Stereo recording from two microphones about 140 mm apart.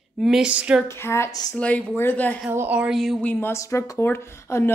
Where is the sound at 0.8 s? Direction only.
20° left (ahead or behind).